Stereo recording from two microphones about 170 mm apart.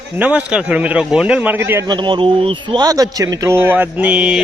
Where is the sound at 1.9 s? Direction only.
30° right (ahead or behind).